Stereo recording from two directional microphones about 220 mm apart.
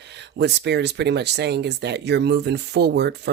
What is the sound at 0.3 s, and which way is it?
Speech, 50° right (ahead or behind).